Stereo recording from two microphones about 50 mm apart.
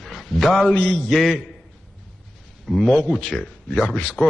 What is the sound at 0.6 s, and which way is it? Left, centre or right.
Speech, left.